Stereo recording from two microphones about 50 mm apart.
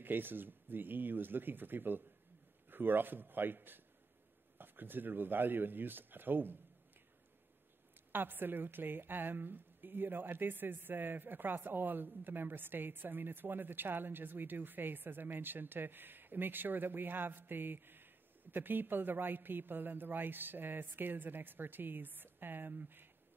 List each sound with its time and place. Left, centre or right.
0.0 s a woman's voice: right
8.1 s a woman's voice: right